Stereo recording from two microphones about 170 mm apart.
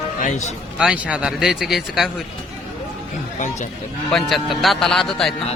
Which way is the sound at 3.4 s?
45° left (ahead or behind).